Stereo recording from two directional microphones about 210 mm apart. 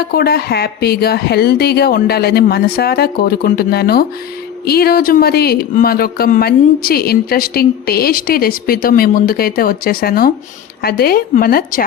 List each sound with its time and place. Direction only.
0.1 s speech: 45° left (ahead or behind)